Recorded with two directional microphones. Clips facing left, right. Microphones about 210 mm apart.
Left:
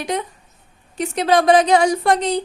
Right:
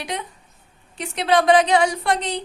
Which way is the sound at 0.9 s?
45° left (ahead or behind).